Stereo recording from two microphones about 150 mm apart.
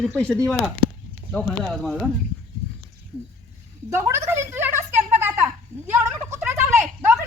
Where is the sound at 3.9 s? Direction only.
20° right (ahead or behind).